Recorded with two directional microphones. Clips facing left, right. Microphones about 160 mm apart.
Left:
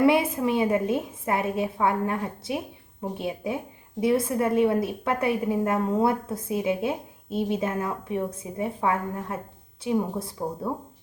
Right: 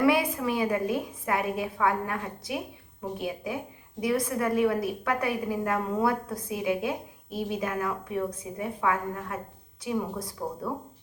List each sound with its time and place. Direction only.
0.0 s a woman's voice: 25° left (ahead or behind)